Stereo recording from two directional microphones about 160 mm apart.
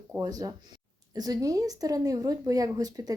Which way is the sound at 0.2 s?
25° right (ahead or behind).